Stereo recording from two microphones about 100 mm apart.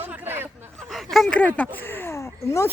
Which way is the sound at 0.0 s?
20° right (ahead or behind).